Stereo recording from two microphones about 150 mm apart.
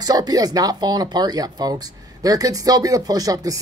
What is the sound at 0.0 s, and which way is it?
Speech, 25° right (ahead or behind).